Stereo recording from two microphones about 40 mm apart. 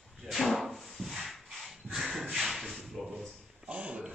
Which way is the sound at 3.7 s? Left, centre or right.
Right.